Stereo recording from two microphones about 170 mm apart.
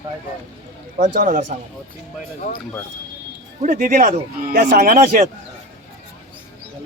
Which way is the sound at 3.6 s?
50° right (ahead or behind).